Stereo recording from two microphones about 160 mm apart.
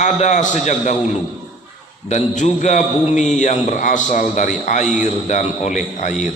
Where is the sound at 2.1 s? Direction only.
45° left (ahead or behind).